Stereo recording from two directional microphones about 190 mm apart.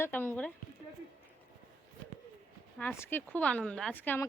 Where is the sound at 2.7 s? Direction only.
10° left (ahead or behind).